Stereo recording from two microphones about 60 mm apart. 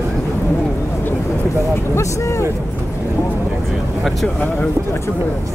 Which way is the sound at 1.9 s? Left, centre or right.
Left.